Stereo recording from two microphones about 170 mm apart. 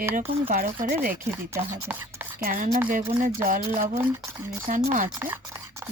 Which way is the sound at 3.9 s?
15° right (ahead or behind).